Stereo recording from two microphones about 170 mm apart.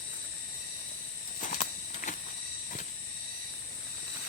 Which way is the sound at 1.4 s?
50° left (ahead or behind).